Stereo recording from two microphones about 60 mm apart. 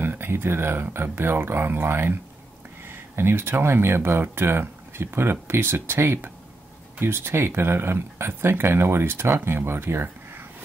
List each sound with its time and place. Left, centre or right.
0.0 s speech: right